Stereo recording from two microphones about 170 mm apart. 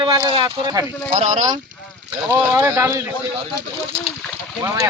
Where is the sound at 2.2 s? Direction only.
15° right (ahead or behind).